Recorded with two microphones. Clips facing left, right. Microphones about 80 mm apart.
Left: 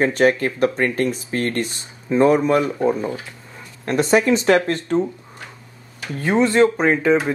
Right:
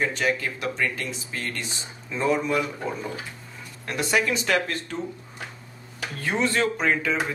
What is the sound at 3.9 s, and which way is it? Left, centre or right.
A man's voice, left.